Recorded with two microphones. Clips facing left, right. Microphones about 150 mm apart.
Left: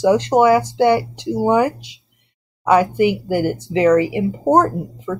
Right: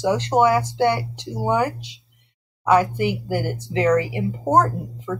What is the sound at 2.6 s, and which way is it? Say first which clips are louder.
Speech: left 4 dB; 15° left (ahead or behind).